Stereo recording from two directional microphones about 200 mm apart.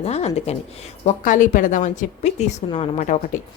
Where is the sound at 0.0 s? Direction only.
30° left (ahead or behind).